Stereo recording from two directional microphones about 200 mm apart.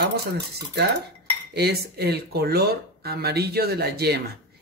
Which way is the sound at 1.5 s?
55° right (ahead or behind).